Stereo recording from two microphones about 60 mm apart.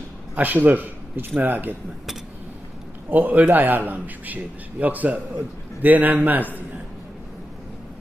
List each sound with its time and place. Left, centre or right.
0.3 s a man's voice: right
3.1 s a man's voice: right